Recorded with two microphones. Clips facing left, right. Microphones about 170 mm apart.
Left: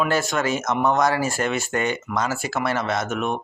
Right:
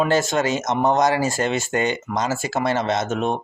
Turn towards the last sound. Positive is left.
turn(degrees=-30)  # may be behind; listen again after turning